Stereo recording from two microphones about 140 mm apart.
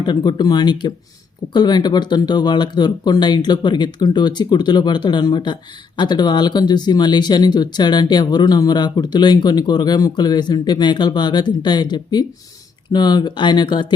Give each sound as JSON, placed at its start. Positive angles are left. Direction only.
{"t": 0.0, "sound": "speech", "side_deg": 30}